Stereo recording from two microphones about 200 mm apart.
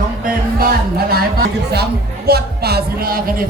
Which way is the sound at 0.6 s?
50° right (ahead or behind).